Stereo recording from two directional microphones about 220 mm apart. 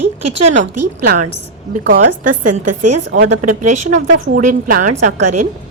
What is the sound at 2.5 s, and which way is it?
Speech, 90° right.